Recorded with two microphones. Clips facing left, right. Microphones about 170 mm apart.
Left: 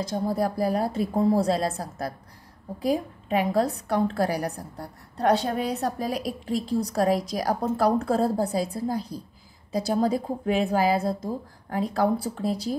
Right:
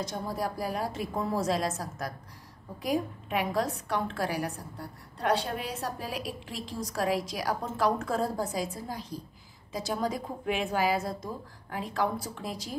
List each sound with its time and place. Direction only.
0.0 s a woman's voice: 35° left (ahead or behind)